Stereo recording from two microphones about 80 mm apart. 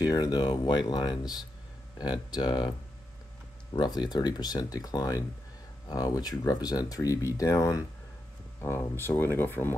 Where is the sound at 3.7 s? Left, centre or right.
Left.